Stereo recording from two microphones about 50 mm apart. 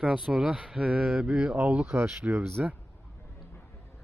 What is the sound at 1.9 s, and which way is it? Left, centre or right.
Speech, right.